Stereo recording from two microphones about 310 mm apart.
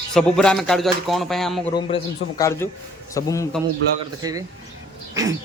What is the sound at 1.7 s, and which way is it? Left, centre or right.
A man's voice, centre.